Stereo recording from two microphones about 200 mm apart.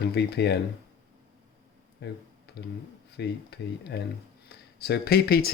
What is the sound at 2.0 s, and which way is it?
Speech, 55° left (ahead or behind).